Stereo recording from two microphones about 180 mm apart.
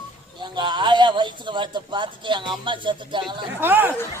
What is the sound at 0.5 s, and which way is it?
A man's voice, 25° right (ahead or behind).